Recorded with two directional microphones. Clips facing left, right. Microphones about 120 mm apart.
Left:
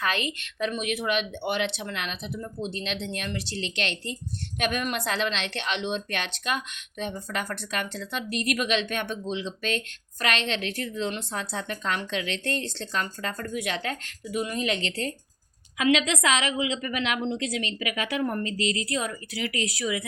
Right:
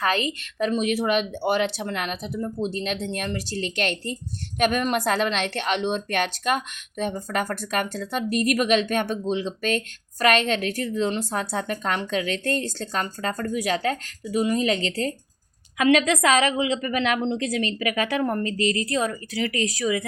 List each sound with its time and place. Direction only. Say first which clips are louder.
0.0 s a woman's voice: right 5 dB; 40° right (ahead or behind)
15.8 s a woman's voice: right 4 dB; 50° right (ahead or behind)